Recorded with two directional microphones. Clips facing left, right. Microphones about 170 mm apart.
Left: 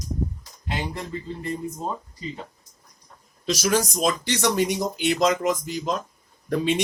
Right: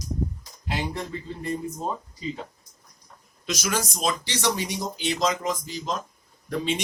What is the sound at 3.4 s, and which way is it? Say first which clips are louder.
Speech: left 5 dB; 35° left (ahead or behind).